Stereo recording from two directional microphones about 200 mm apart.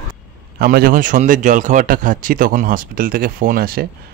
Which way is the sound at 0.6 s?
45° right (ahead or behind).